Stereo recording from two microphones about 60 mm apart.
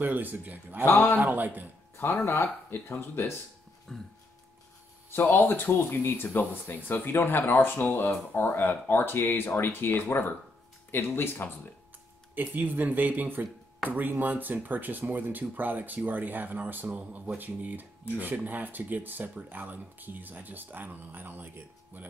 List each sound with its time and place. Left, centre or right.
0.0 s a man's voice: right
0.8 s speech: left
1.1 s speech: right
2.0 s speech: left
3.9 s a sound: centre
5.1 s speech: left
12.4 s speech: right